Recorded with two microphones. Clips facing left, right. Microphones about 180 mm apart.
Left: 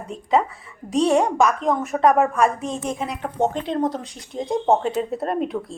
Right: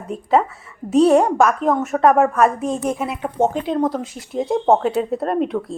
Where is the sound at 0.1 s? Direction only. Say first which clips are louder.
Right 3 dB; 5° right (ahead or behind).